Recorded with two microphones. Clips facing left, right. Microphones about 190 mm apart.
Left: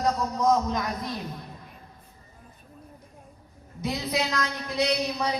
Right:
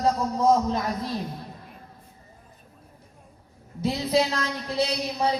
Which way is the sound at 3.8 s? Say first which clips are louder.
Right 5 dB; 30° right (ahead or behind).